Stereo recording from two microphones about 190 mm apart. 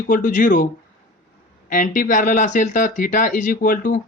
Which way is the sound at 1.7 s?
45° left (ahead or behind).